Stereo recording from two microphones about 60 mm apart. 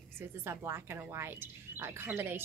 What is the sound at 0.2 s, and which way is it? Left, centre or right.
A woman's voice, right.